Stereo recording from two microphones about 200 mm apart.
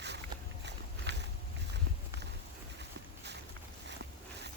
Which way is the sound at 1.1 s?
60° right (ahead or behind).